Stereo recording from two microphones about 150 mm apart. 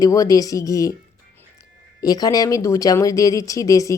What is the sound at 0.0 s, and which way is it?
Speech, 25° left (ahead or behind).